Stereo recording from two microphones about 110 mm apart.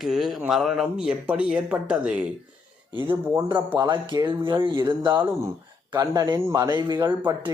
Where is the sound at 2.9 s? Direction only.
20° right (ahead or behind).